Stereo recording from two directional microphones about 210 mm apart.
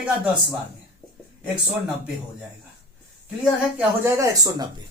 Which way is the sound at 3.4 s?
5° right (ahead or behind).